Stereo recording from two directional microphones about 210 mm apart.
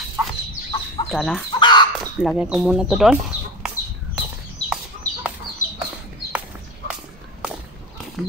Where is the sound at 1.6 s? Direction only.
20° left (ahead or behind).